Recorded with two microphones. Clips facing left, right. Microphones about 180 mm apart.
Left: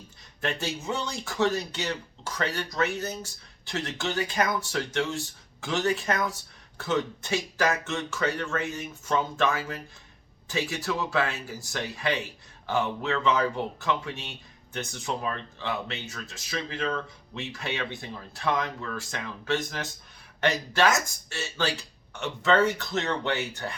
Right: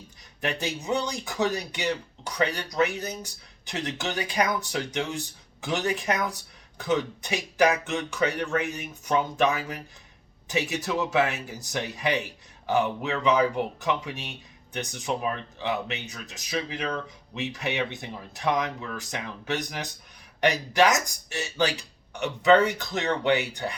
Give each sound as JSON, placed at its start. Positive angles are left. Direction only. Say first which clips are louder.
{"t": 0.4, "sound": "speech", "louder": "right 1 dB", "side_deg": -15}